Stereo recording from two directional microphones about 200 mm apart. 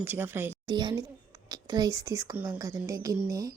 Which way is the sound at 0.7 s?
20° right (ahead or behind).